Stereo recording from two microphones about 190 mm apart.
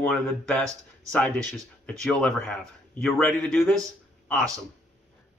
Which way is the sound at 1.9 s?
5° left (ahead or behind).